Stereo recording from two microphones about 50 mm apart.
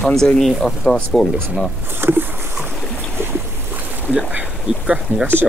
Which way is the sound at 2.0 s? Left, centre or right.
Right.